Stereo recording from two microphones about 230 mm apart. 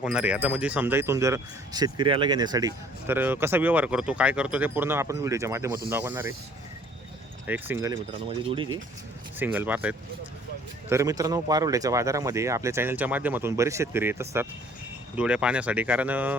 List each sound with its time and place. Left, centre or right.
0.0 s speech: centre
7.4 s speech: centre
8.4 s speech: right
9.4 s speech: centre